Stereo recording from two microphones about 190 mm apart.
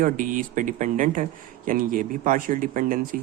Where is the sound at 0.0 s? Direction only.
45° right (ahead or behind).